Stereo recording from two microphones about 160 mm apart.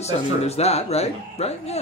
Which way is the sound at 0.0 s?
40° left (ahead or behind).